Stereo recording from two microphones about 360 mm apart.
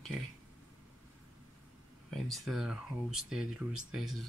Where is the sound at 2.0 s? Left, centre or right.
Centre.